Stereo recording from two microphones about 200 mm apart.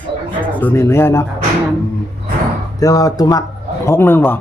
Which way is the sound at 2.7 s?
15° left (ahead or behind).